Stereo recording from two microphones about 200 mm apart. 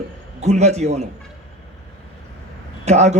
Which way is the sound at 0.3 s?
35° right (ahead or behind).